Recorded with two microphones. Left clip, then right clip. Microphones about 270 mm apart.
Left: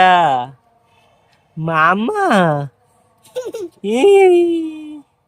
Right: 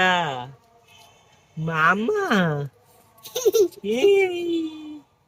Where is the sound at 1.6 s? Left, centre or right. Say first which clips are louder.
Left 6 dB; centre.